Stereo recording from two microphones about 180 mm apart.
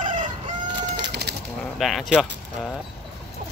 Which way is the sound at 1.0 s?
70° right (ahead or behind).